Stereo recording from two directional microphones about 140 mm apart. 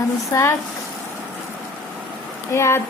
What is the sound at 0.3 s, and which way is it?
Speech, 20° left (ahead or behind).